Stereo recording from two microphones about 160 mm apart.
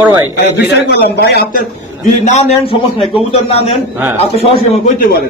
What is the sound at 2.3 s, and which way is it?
A man's voice, 45° left (ahead or behind).